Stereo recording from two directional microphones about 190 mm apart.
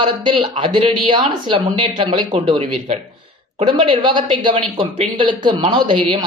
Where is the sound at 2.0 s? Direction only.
25° right (ahead or behind).